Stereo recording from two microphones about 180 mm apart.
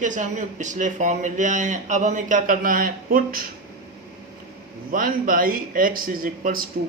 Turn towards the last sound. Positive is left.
turn(degrees=-50)  # may be behind; listen again after turning